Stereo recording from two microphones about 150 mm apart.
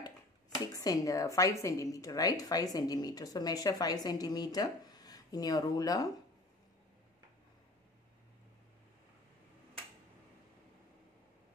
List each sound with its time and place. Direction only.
0.7 s a woman's voice: 20° left (ahead or behind)